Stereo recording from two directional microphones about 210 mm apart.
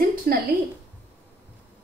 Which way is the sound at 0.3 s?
45° right (ahead or behind).